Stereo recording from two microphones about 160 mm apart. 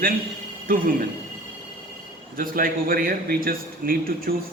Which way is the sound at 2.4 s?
60° right (ahead or behind).